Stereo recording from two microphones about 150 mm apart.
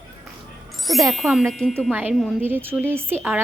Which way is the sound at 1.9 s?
10° right (ahead or behind).